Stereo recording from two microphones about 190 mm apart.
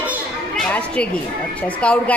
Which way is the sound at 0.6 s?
5° left (ahead or behind).